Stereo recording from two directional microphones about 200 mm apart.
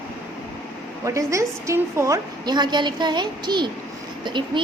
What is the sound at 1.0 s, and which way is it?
A woman's voice, 15° right (ahead or behind).